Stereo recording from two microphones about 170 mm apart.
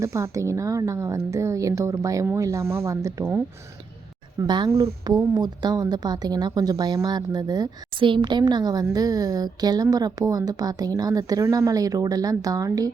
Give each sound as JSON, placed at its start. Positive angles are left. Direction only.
{"t": 0.0, "sound": "a woman's voice", "side_deg": -15}